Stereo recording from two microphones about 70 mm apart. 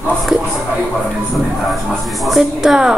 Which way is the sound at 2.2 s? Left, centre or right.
Centre.